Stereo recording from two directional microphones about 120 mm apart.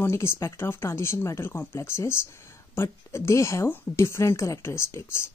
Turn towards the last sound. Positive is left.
turn(degrees=20)  # may be behind; listen again after turning